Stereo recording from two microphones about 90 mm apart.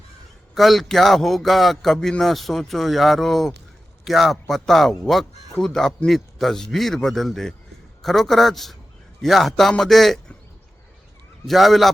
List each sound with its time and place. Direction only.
0.5 s speech: centre (ahead or behind)
11.4 s speech: centre (ahead or behind)